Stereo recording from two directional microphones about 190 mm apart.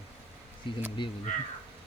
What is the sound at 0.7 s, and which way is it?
Speech, 25° left (ahead or behind).